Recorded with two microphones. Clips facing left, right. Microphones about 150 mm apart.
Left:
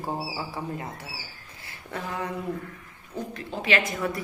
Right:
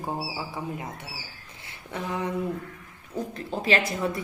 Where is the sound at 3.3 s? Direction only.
35° right (ahead or behind).